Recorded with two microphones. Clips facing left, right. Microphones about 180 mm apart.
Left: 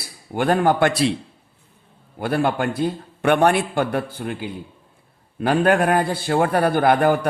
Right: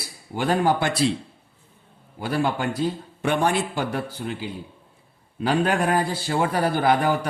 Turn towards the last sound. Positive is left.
turn(degrees=55)  # may be behind; listen again after turning